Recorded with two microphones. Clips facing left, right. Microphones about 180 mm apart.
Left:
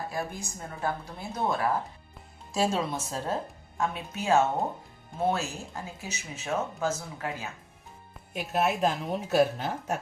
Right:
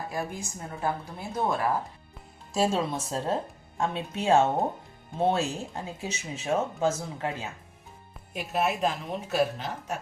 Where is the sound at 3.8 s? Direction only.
30° right (ahead or behind).